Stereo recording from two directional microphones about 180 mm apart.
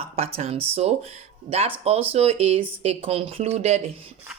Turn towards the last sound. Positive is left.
turn(degrees=-35)  # may be behind; listen again after turning